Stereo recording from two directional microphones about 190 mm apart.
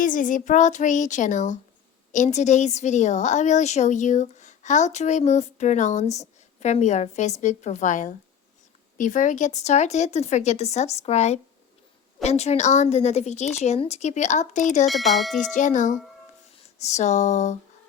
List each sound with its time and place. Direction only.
0.0 s a woman's voice: 45° left (ahead or behind)
14.8 s speech: centre (ahead or behind)
15.5 s a woman's voice: 40° left (ahead or behind)